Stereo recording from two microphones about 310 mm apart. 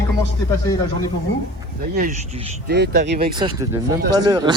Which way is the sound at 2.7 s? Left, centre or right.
Right.